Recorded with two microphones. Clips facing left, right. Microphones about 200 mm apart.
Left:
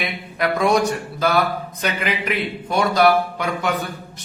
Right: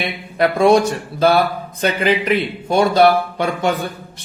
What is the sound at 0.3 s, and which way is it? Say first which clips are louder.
Speech: right 6 dB; 30° right (ahead or behind).